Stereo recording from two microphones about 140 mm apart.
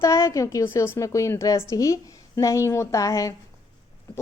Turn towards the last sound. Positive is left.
turn(degrees=25)  # may be behind; listen again after turning